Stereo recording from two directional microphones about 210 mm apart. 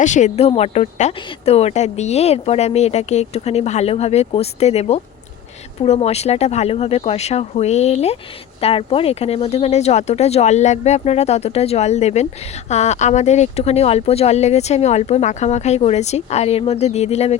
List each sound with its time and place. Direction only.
0.0 s speech: 35° left (ahead or behind)